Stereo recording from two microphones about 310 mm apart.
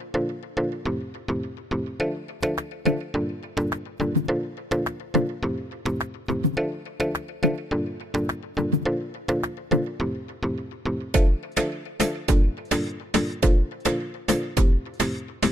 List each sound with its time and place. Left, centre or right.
0.1 s music: centre